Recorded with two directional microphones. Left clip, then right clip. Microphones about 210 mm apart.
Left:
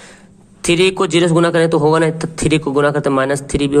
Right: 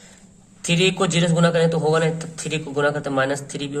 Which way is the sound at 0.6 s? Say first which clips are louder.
Left 6 dB; 35° left (ahead or behind).